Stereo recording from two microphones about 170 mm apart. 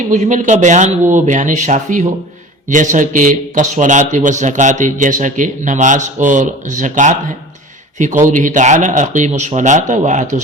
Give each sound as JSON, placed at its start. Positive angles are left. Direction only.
{"t": 0.1, "sound": "a man's voice", "side_deg": -45}